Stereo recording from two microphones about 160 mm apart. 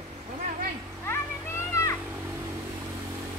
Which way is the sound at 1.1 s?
15° left (ahead or behind).